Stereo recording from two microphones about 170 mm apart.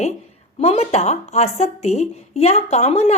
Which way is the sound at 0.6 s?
40° left (ahead or behind).